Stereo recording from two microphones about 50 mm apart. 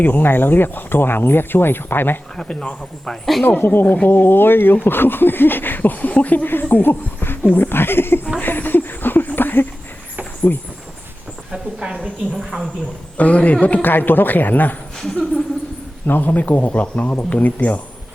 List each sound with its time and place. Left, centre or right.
0.0 s speech: left
2.3 s speech: centre
3.4 s speech: left
8.4 s a sound: left
10.5 s speech: left
11.5 s a sound: centre
12.4 s speech: centre
13.1 s a man's voice: left
13.8 s speech: left
16.0 s speech: left